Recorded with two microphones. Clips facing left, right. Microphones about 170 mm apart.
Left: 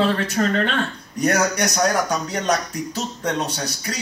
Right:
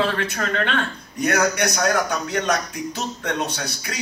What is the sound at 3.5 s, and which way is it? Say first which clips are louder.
Speech: left 2 dB; 40° left (ahead or behind).